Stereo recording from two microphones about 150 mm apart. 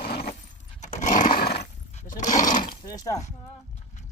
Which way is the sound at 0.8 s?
50° left (ahead or behind).